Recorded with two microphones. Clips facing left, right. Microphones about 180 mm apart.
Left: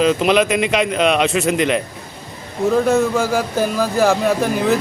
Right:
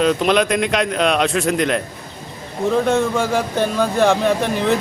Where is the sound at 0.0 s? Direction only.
Centre (ahead or behind).